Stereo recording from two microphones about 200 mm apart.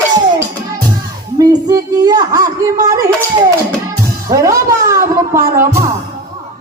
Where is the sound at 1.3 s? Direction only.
20° right (ahead or behind).